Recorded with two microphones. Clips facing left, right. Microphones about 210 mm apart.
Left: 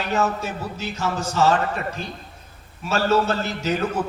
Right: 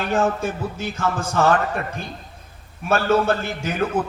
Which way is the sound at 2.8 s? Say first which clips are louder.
Right 2 dB; 55° right (ahead or behind).